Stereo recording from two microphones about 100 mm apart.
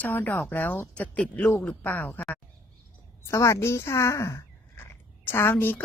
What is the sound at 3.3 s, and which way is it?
Speech, 30° left (ahead or behind).